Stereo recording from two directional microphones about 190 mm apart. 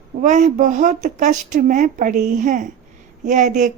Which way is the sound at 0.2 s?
40° right (ahead or behind).